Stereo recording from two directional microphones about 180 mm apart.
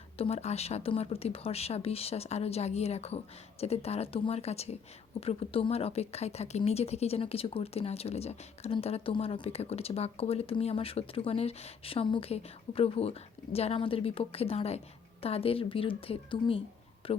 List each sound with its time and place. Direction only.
0.2 s a woman's voice: 35° left (ahead or behind)